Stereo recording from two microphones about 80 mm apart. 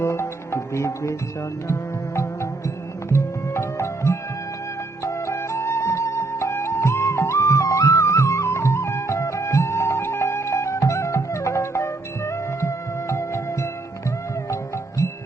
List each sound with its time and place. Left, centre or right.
0.0 s music: left